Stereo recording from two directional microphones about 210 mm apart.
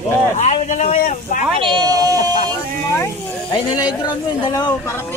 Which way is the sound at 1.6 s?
20° right (ahead or behind).